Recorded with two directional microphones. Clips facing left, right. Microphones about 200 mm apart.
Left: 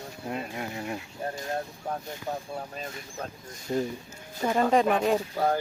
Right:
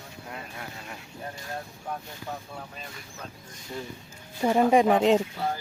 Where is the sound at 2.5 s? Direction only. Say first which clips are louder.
Left 5 dB; 40° left (ahead or behind).